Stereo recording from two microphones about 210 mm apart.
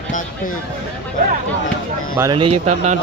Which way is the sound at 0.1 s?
40° left (ahead or behind).